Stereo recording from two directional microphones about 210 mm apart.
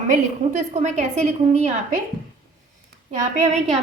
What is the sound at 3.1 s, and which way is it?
Speech, 35° right (ahead or behind).